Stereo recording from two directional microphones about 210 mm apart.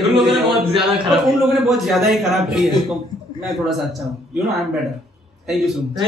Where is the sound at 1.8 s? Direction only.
Centre (ahead or behind).